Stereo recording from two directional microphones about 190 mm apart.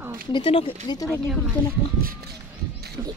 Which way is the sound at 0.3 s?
30° left (ahead or behind).